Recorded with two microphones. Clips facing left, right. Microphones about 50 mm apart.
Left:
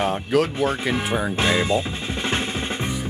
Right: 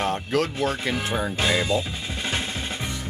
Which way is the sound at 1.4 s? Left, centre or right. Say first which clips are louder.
Left 2 dB; left.